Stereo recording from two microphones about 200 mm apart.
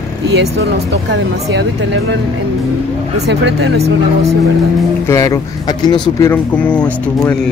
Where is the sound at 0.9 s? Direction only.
60° right (ahead or behind).